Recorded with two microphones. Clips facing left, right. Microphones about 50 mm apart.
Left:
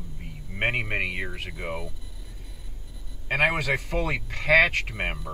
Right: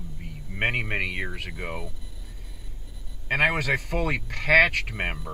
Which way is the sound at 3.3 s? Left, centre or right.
Right.